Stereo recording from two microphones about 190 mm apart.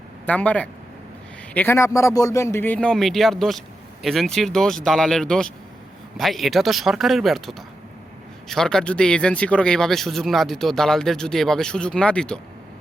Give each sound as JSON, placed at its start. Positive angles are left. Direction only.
{"t": 0.3, "sound": "speech", "side_deg": 5}